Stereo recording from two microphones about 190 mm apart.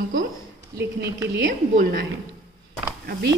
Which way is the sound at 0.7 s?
15° right (ahead or behind).